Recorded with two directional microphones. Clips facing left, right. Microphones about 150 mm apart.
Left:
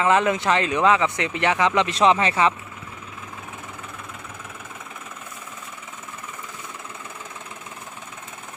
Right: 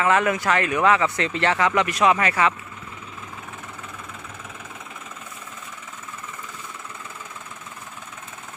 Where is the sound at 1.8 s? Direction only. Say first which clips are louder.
Left 1 dB; 25° left (ahead or behind).